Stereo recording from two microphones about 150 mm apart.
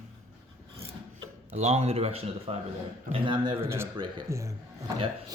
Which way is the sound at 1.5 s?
45° right (ahead or behind).